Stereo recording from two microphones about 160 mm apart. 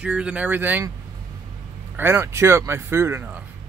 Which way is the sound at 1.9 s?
15° right (ahead or behind).